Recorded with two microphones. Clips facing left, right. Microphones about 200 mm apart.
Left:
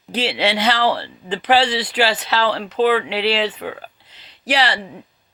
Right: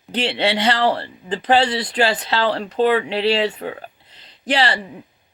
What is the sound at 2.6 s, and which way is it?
Speech, 30° right (ahead or behind).